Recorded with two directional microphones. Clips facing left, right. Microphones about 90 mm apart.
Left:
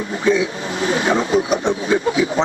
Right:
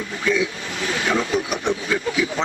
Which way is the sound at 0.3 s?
30° left (ahead or behind).